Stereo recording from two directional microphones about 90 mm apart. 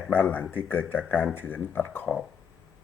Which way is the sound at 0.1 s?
20° left (ahead or behind).